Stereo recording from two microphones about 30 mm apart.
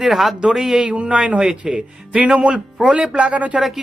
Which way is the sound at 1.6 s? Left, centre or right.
Right.